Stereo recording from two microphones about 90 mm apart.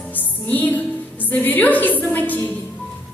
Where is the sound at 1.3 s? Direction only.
20° left (ahead or behind).